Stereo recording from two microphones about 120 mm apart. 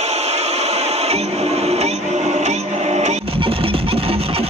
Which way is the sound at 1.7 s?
65° right (ahead or behind).